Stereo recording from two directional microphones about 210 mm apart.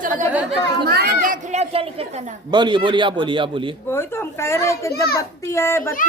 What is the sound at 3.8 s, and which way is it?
A woman's voice, 10° left (ahead or behind).